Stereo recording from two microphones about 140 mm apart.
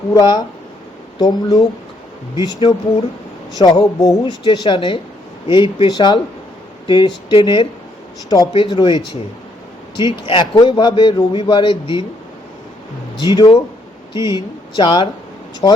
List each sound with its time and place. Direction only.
0.1 s a man's voice: 30° left (ahead or behind)
13.3 s a man's voice: 35° left (ahead or behind)